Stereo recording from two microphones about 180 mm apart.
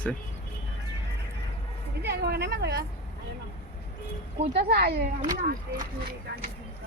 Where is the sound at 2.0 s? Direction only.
60° right (ahead or behind).